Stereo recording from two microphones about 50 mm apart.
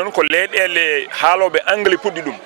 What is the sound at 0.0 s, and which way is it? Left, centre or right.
Speech, centre.